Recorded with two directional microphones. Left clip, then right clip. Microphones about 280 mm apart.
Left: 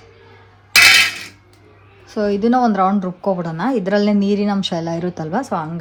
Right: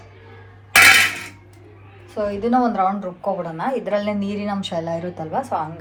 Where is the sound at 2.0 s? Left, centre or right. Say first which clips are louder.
Left 4 dB; left.